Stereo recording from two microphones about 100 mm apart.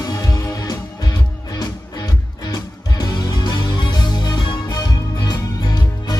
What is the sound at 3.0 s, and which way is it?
Music, 40° left (ahead or behind).